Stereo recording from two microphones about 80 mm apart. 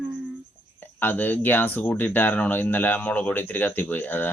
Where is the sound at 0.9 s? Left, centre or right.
Left.